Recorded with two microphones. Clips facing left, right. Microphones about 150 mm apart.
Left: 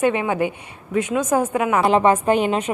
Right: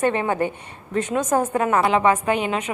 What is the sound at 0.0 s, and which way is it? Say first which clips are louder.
A woman's voice: left 1 dB; 10° left (ahead or behind).